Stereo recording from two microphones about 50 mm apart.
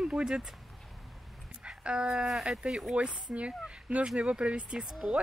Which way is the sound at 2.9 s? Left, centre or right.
Right.